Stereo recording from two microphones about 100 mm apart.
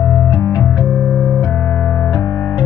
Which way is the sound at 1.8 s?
10° left (ahead or behind).